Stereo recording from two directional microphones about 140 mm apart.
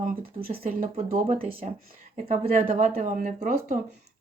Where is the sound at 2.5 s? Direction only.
70° right (ahead or behind).